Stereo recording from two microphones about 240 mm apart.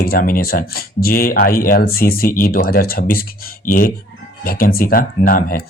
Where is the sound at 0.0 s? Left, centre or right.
Left.